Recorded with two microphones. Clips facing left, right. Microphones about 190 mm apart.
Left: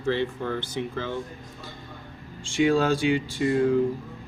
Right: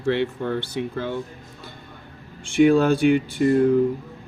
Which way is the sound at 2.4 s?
60° right (ahead or behind).